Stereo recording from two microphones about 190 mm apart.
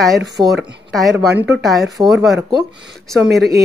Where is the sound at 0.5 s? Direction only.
Centre (ahead or behind).